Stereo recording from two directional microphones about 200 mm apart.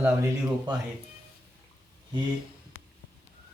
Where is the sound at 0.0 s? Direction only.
15° right (ahead or behind).